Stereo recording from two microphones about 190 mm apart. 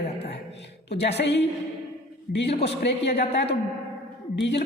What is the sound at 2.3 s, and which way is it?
Speech, 50° left (ahead or behind).